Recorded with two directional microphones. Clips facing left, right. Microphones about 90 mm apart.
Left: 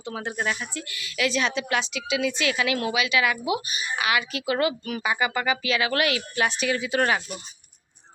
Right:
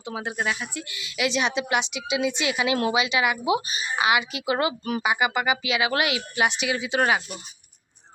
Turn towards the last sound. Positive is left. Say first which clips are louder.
# even
turn(degrees=-15)  # may be behind; listen again after turning